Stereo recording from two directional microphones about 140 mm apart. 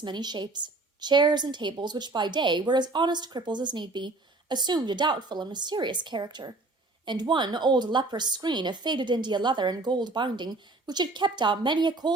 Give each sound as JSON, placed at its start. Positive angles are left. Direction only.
{"t": 0.0, "sound": "a woman's voice", "side_deg": -30}